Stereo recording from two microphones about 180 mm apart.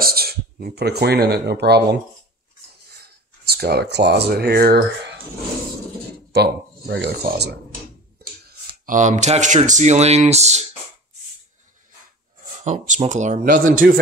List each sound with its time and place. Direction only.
0.0 s speech: 60° right (ahead or behind)
3.0 s speech: 60° right (ahead or behind)
6.3 s speech: 70° right (ahead or behind)
8.5 s speech: 50° right (ahead or behind)
12.6 s speech: 45° right (ahead or behind)